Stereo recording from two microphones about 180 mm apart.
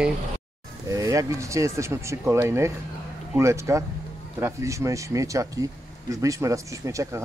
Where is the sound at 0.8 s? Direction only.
20° right (ahead or behind).